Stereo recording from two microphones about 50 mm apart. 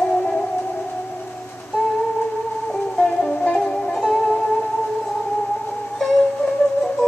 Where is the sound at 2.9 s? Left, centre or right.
Centre.